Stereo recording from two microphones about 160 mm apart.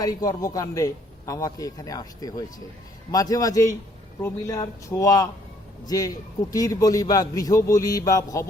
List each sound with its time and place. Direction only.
0.0 s a man's voice: 20° left (ahead or behind)